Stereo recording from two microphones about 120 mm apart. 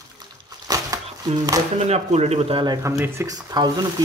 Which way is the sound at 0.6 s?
30° right (ahead or behind).